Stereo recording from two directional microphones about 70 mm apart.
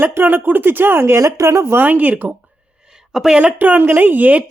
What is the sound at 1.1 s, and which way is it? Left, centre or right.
Speech, right.